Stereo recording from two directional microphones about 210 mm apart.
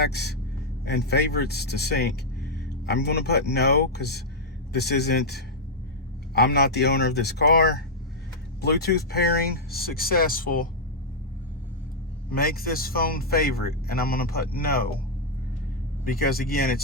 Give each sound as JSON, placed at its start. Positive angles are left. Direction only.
{"t": 0.0, "sound": "speech", "side_deg": 50}
{"t": 12.3, "sound": "speech", "side_deg": 45}
{"t": 16.0, "sound": "speech", "side_deg": 45}